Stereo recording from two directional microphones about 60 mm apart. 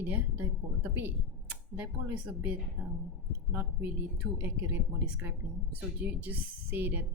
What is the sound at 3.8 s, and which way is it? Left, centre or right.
A woman's voice, right.